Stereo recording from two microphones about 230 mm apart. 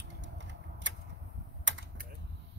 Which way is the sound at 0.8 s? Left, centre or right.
Right.